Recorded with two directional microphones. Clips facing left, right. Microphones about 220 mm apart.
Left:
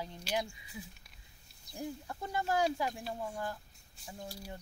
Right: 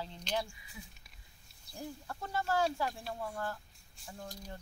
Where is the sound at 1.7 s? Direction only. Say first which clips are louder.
Left 3 dB; 15° left (ahead or behind).